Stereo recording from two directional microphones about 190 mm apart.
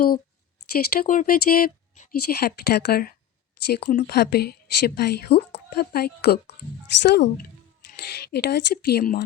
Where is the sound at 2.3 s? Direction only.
55° left (ahead or behind).